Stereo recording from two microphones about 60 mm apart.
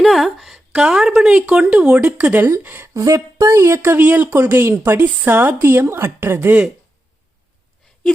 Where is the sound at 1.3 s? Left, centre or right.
Right.